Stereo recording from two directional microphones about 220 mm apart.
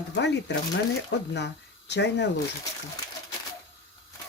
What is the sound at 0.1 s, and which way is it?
Speech, 50° left (ahead or behind).